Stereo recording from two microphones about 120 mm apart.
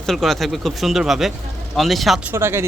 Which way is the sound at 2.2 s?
20° right (ahead or behind).